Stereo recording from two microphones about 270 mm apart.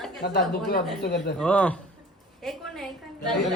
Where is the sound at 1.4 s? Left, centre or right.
Centre.